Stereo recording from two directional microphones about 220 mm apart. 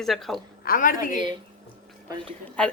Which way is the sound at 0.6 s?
40° left (ahead or behind).